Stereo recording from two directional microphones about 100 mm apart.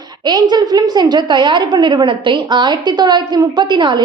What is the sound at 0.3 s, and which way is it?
A woman's voice, 45° right (ahead or behind).